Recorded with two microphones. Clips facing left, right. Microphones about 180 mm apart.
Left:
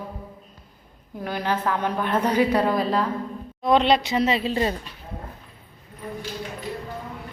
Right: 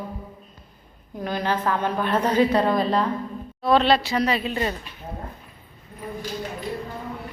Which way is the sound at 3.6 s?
20° left (ahead or behind).